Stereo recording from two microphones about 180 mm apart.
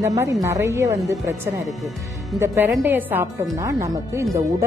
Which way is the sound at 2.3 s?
15° right (ahead or behind).